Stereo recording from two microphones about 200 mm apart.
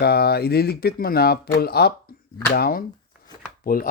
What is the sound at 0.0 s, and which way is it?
Speech, 50° left (ahead or behind).